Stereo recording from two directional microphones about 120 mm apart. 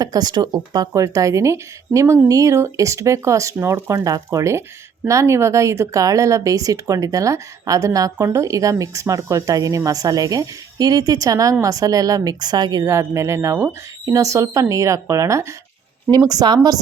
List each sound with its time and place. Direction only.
0.0 s speech: 35° right (ahead or behind)
12.8 s speech: 25° right (ahead or behind)